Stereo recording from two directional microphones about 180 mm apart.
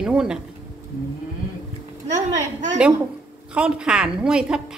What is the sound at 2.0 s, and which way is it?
Speech, 40° right (ahead or behind).